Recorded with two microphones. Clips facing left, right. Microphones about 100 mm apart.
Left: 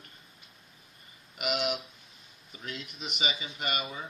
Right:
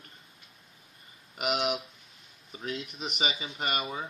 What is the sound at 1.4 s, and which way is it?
Speech, 45° right (ahead or behind).